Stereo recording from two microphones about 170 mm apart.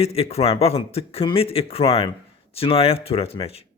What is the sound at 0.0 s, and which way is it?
Speech, 35° left (ahead or behind).